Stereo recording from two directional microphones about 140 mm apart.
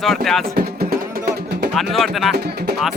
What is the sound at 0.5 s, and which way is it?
Music, 90° right.